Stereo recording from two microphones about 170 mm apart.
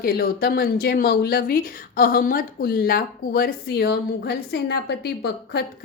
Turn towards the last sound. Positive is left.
turn(degrees=70)  # may be behind; listen again after turning